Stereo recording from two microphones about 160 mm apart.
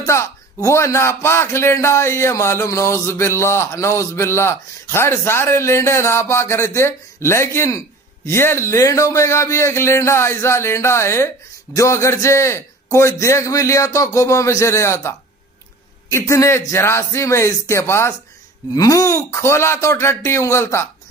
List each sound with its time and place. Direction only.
0.0 s a man's voice: 20° left (ahead or behind)